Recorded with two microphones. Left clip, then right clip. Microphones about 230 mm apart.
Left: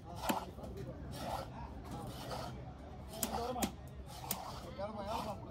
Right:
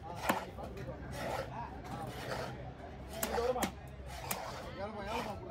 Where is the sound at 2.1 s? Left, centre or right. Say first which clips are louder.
Right 3 dB; right.